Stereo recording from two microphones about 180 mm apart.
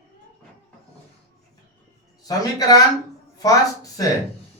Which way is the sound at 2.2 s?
20° left (ahead or behind).